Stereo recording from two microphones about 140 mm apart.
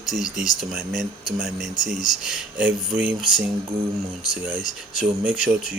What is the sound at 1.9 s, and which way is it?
Speech, 75° left (ahead or behind).